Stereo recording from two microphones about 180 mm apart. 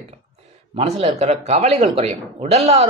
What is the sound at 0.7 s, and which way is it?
A man's voice, 35° right (ahead or behind).